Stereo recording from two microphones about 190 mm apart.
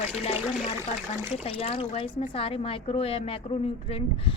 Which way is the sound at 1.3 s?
30° left (ahead or behind).